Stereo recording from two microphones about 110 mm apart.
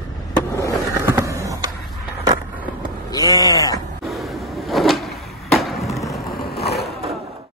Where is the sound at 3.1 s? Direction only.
35° left (ahead or behind).